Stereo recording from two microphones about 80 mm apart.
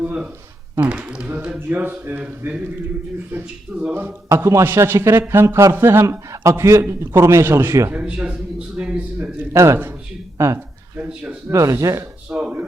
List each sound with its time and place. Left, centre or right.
0.0 s a sound: centre
0.8 s speech: centre
3.7 s speech: centre
4.6 s a man's voice: right
7.9 s speech: centre
9.5 s a man's voice: right
10.9 s speech: right
11.5 s speech: right
12.3 s speech: centre